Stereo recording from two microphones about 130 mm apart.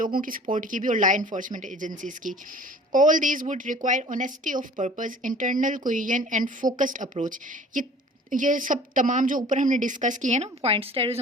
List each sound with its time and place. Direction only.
0.0 s a woman's voice: 90° right; by 11.2 s 45° right (ahead or behind)